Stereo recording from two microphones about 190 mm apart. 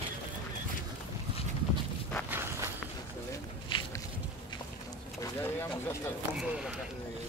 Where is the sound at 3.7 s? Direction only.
25° left (ahead or behind).